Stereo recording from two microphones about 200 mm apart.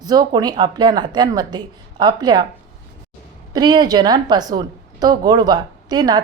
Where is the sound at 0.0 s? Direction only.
20° right (ahead or behind).